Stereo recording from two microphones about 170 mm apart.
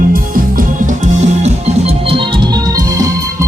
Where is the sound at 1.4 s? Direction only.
40° right (ahead or behind).